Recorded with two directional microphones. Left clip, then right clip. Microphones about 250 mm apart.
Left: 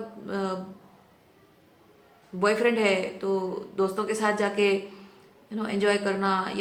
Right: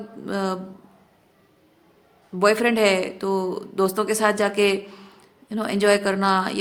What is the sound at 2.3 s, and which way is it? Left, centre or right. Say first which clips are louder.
Speech: right 5 dB; right.